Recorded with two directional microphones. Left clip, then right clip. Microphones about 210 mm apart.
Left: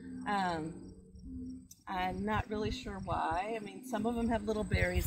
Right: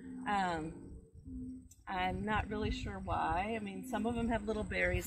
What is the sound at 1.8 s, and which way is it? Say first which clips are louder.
Speech: left 1 dB; 25° left (ahead or behind).